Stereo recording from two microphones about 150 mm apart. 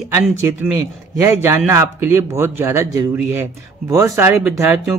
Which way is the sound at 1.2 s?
20° right (ahead or behind).